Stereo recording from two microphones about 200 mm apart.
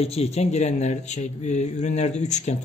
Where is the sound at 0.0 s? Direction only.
30° left (ahead or behind).